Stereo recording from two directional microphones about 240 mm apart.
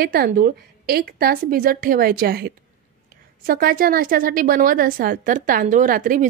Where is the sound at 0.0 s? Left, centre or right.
Right.